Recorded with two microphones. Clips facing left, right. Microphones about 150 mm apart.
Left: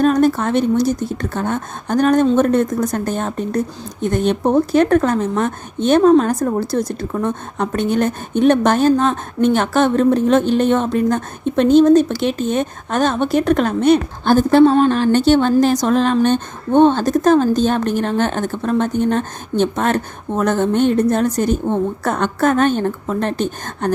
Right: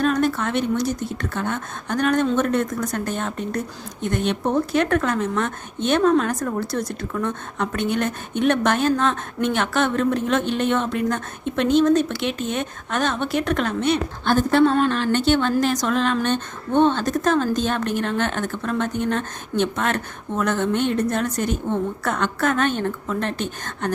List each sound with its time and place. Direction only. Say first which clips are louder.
0.0 s speech: left 6 dB; 40° left (ahead or behind)